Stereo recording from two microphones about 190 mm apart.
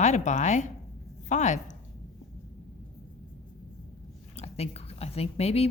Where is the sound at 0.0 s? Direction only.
40° left (ahead or behind).